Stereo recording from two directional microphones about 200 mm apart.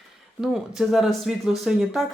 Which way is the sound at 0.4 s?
Centre (ahead or behind).